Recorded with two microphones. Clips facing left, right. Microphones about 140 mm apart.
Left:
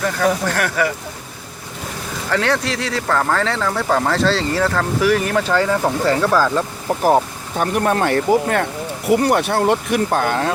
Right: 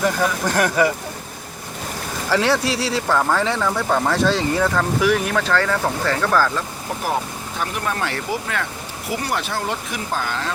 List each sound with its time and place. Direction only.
0.0 s speech: 15° right (ahead or behind)
2.3 s speech: 10° right (ahead or behind)
2.7 s speech: 30° right (ahead or behind)
3.1 s speech: centre (ahead or behind)
3.4 s speech: 15° right (ahead or behind)
3.7 s speech: centre (ahead or behind)
4.2 s speech: 15° right (ahead or behind)
4.6 s speech: centre (ahead or behind)
5.4 s speech: 15° left (ahead or behind)
7.6 s speech: 50° left (ahead or behind)